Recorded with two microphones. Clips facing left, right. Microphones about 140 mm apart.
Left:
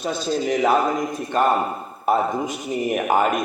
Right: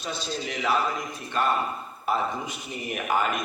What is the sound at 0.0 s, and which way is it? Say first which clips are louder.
A man's voice: left 9 dB; 50° left (ahead or behind).